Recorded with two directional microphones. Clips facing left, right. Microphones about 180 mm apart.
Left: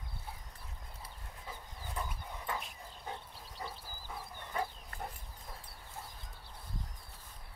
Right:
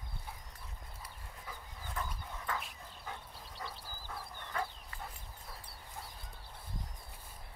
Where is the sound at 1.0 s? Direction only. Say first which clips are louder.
Left 1 dB; 20° left (ahead or behind).